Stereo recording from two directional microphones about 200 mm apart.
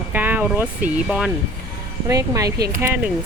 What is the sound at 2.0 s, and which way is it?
Speech, 15° right (ahead or behind).